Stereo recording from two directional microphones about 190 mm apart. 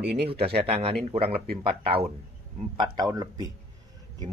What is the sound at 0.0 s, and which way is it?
Speech, 60° right (ahead or behind).